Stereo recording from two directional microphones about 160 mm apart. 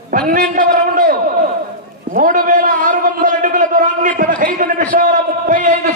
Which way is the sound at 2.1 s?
55° right (ahead or behind).